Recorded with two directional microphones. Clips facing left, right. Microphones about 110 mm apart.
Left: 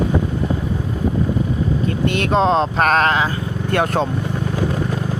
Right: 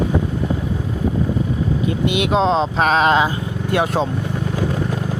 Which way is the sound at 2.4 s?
Centre (ahead or behind).